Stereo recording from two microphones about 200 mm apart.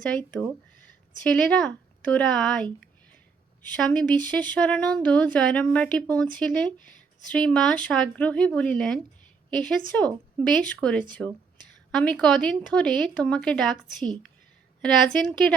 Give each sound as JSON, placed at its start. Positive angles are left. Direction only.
{"t": 1.2, "sound": "speech", "side_deg": 5}
{"t": 3.8, "sound": "speech", "side_deg": 5}